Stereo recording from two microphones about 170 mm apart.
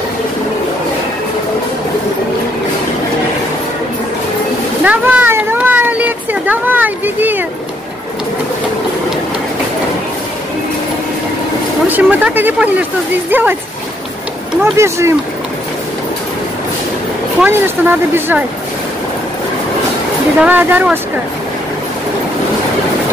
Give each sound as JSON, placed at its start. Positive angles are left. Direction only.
{"t": 4.8, "sound": "a sound", "side_deg": -10}
{"t": 11.9, "sound": "speech", "side_deg": -10}
{"t": 14.6, "sound": "speech", "side_deg": -15}
{"t": 17.5, "sound": "speech", "side_deg": -15}
{"t": 20.3, "sound": "speech", "side_deg": -10}